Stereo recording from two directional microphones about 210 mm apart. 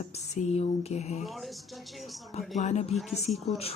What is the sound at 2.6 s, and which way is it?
Speech, 30° left (ahead or behind).